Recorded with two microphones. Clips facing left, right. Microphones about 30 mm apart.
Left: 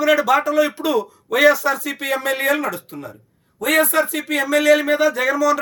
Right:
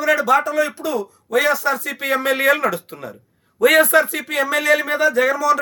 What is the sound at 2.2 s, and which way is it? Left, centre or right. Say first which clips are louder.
Speech: right 3 dB; right.